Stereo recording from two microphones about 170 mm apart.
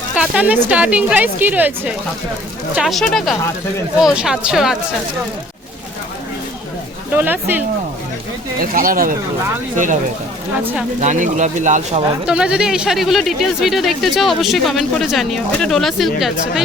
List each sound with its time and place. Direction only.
0.2 s a woman's voice: 10° right (ahead or behind)
2.7 s speech: centre (ahead or behind)
7.1 s a woman's voice: 10° right (ahead or behind)
8.6 s speech: 55° right (ahead or behind)
10.6 s a woman's voice: 10° right (ahead or behind)
11.0 s speech: 45° right (ahead or behind)
12.2 s speech: 5° right (ahead or behind)